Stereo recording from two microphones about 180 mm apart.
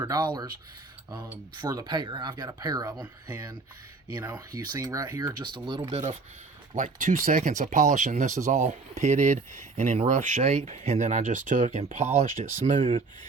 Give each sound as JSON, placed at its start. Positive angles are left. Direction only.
{"t": 1.6, "sound": "speech", "side_deg": -20}
{"t": 4.2, "sound": "speech", "side_deg": -10}
{"t": 6.7, "sound": "speech", "side_deg": -45}